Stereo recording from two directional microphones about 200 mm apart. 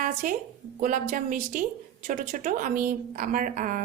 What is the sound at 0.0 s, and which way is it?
A woman's voice, 45° right (ahead or behind).